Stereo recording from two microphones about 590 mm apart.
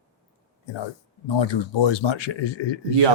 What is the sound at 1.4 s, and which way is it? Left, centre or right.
Speech, left.